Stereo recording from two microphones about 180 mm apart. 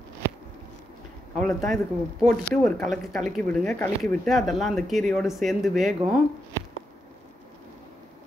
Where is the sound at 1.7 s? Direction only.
Centre (ahead or behind).